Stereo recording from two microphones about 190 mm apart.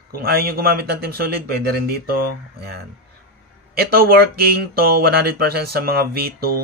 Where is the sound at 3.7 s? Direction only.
55° right (ahead or behind).